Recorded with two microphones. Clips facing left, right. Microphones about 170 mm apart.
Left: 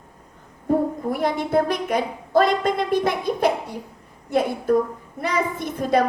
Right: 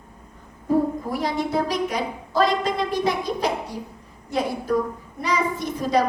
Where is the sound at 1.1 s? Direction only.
55° left (ahead or behind).